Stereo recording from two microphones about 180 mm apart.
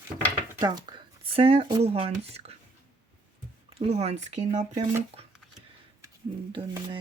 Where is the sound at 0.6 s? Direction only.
25° right (ahead or behind).